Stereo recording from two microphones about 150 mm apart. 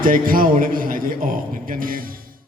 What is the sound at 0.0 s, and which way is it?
Speech, 65° right (ahead or behind).